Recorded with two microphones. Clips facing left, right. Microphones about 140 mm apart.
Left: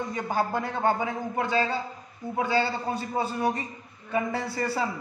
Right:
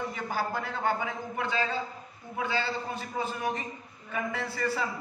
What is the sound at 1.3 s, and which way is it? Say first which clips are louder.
A man's voice: left 4 dB; 40° left (ahead or behind).